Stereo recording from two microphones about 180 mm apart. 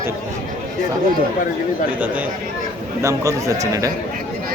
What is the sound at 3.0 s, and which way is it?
Speech, 15° right (ahead or behind).